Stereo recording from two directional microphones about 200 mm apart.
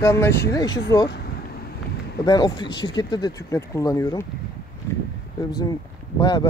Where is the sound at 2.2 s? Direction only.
20° left (ahead or behind).